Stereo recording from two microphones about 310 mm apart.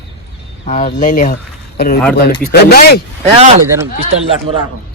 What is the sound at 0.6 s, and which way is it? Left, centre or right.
Speech, left.